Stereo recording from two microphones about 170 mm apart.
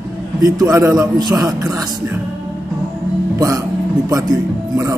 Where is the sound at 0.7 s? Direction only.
20° right (ahead or behind).